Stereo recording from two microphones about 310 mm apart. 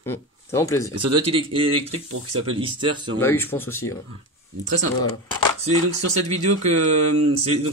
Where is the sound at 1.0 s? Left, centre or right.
Centre.